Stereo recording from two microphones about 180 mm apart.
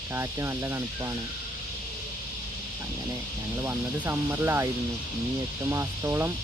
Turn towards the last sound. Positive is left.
turn(degrees=-15)  # may be behind; listen again after turning